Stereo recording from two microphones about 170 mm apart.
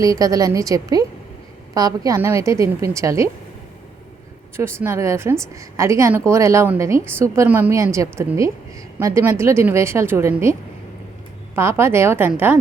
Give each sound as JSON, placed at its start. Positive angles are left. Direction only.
{"t": 0.0, "sound": "a woman's voice", "side_deg": -20}
{"t": 4.5, "sound": "a woman's voice", "side_deg": -15}